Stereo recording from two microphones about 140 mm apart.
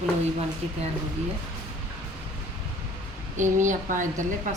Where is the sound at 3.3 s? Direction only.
65° right (ahead or behind).